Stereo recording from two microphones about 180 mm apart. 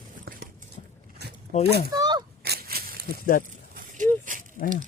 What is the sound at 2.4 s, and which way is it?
Wheeze, 60° right (ahead or behind).